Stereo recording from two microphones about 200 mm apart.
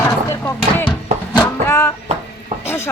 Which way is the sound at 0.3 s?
15° left (ahead or behind).